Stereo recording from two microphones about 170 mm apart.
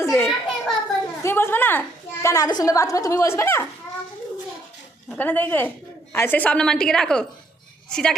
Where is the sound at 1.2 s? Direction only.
15° left (ahead or behind).